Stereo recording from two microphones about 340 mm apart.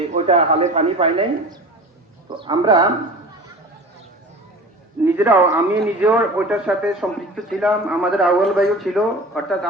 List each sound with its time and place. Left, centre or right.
0.1 s a man's voice: centre
5.0 s a man's voice: centre